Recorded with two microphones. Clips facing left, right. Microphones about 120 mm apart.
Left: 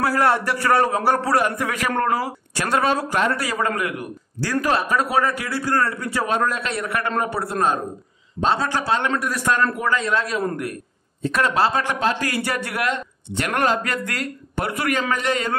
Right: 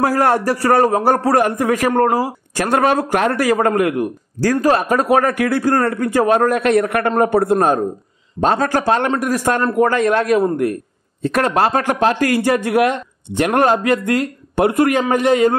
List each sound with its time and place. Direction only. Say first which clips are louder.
0.0 s a man's voice: right 4 dB; 45° right (ahead or behind)